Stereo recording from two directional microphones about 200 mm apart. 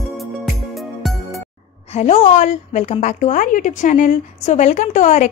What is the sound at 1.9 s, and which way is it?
A woman's voice, 35° left (ahead or behind).